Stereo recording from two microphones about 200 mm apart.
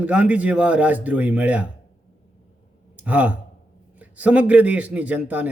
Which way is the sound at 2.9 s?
10° right (ahead or behind).